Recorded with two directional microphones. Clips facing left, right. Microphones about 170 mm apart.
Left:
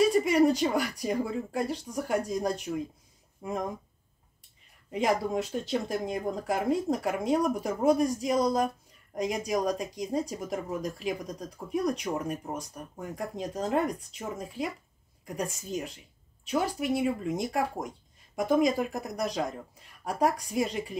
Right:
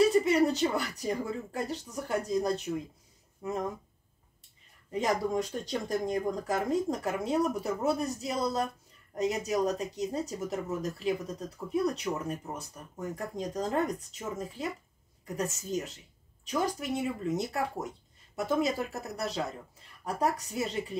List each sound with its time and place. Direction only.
0.0 s speech: 10° left (ahead or behind)
4.9 s speech: 10° left (ahead or behind)